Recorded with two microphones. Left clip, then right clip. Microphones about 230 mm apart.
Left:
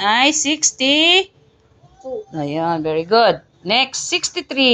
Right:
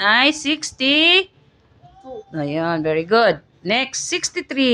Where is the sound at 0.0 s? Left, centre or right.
Centre.